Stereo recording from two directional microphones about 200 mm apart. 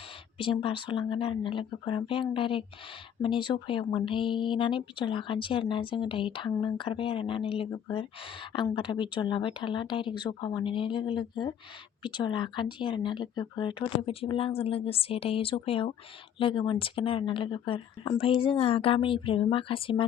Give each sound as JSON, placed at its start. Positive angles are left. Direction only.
{"t": 0.3, "sound": "speech", "side_deg": 25}